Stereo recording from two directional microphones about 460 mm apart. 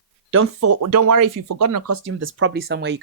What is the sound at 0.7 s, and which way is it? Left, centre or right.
Speech, right.